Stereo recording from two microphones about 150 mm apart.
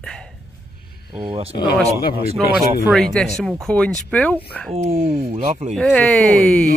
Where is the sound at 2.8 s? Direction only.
5° left (ahead or behind).